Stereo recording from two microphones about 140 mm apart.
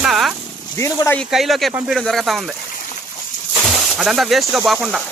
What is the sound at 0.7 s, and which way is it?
Speech, 20° left (ahead or behind).